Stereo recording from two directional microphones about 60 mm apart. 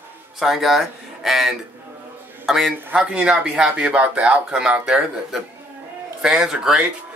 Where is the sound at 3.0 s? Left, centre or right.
Centre.